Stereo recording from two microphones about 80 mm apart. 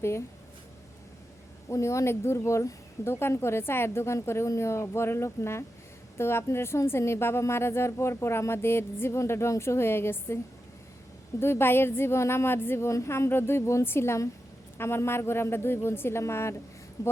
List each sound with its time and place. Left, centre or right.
1.7 s a woman's voice: left
11.3 s a woman's voice: left